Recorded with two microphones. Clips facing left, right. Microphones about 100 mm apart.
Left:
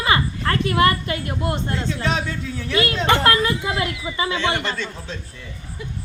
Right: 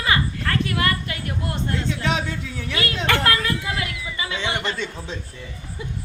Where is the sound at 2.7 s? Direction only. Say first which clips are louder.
Left 4 dB; 25° left (ahead or behind).